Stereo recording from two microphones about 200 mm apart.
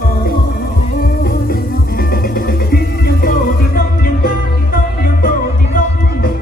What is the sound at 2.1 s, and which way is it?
Music, 50° left (ahead or behind).